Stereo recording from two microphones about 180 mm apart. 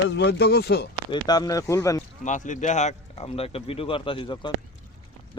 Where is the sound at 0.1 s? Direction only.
70° left (ahead or behind).